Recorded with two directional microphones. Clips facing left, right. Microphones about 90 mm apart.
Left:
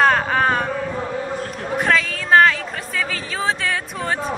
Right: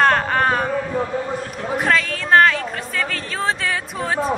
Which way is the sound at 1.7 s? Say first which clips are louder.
Even; centre (ahead or behind).